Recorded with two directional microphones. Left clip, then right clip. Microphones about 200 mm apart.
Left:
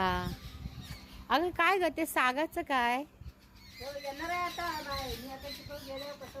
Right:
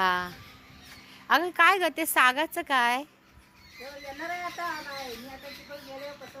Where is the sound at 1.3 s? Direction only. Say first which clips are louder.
Right 6 dB; centre (ahead or behind).